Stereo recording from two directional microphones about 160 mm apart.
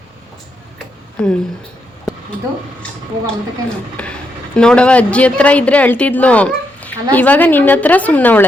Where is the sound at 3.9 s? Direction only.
5° left (ahead or behind).